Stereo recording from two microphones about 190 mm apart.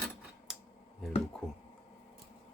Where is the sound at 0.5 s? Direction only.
5° right (ahead or behind).